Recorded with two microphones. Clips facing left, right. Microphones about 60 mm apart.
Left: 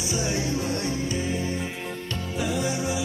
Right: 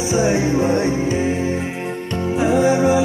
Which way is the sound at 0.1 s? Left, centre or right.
Right.